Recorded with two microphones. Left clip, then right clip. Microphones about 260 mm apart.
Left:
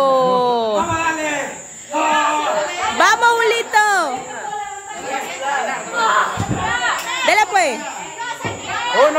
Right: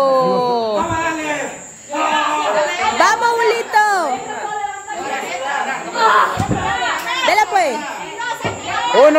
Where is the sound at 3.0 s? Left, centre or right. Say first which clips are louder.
Left 2 dB; centre.